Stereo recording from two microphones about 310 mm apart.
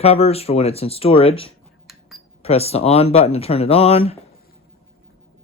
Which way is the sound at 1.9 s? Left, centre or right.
Centre.